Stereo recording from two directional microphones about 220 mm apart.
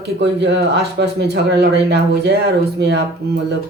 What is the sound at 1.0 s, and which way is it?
Speech, 45° right (ahead or behind).